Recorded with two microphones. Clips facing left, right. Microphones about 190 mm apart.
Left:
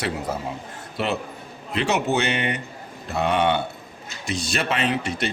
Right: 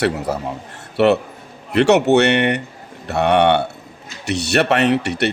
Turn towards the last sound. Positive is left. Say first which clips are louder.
# right 7 dB
turn(degrees=-70)  # may be behind; listen again after turning